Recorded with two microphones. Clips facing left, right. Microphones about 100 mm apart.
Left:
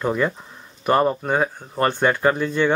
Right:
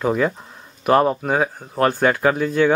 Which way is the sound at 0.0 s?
5° right (ahead or behind).